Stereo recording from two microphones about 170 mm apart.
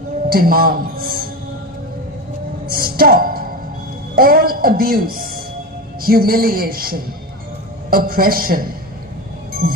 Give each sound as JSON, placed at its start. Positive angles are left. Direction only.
{"t": 0.3, "sound": "a man's voice", "side_deg": -60}
{"t": 2.7, "sound": "a sound", "side_deg": -60}
{"t": 4.1, "sound": "a man's voice", "side_deg": -60}